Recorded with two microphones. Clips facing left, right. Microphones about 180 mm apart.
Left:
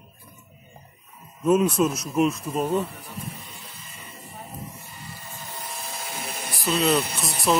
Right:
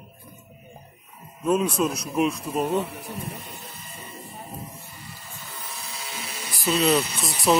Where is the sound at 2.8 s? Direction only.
70° right (ahead or behind).